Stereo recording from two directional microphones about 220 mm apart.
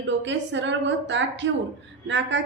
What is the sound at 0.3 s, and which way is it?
A woman's voice, 55° right (ahead or behind).